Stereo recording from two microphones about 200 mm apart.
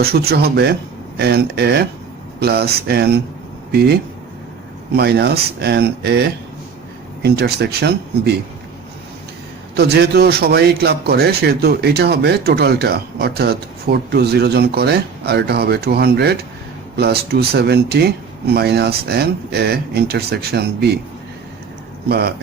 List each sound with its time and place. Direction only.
0.0 s a man's voice: 50° right (ahead or behind)
4.9 s speech: 55° right (ahead or behind)
9.7 s a man's voice: 55° right (ahead or behind)
22.1 s a man's voice: 55° right (ahead or behind)